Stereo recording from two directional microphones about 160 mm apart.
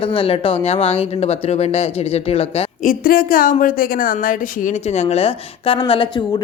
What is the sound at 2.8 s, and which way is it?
A woman's voice, 65° left (ahead or behind).